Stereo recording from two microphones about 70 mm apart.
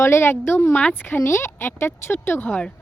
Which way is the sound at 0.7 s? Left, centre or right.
Centre.